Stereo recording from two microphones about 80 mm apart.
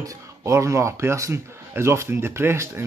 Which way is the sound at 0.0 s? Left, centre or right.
Right.